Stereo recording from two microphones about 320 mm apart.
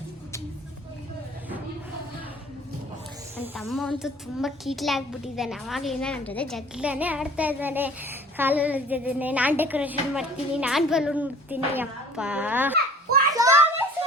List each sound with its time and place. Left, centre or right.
3.3 s a child's voice: centre
13.3 s children playing: centre